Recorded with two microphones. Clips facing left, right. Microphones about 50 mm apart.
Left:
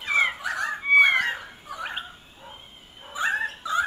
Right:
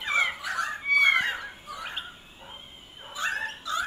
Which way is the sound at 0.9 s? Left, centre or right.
Left.